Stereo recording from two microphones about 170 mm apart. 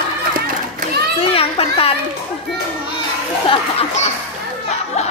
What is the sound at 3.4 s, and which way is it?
Speech, 35° left (ahead or behind).